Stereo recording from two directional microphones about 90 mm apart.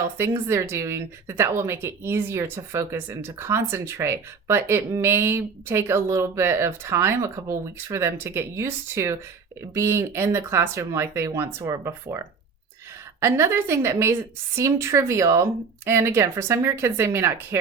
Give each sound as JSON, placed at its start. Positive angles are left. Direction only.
{"t": 0.2, "sound": "a woman's voice", "side_deg": -30}
{"t": 13.1, "sound": "a woman's voice", "side_deg": -35}